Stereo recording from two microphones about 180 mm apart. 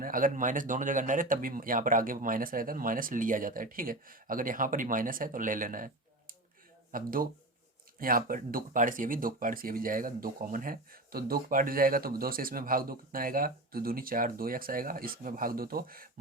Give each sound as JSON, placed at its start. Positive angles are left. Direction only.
{"t": 0.0, "sound": "speech", "side_deg": -50}